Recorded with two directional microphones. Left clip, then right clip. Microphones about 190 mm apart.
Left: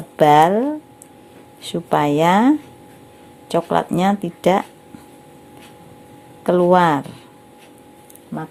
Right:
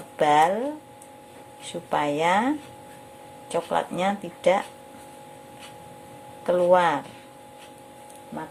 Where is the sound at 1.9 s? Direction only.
50° left (ahead or behind).